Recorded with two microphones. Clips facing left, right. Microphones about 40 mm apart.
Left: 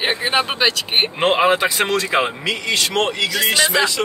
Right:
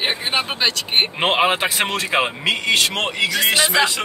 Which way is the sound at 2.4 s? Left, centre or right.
Right.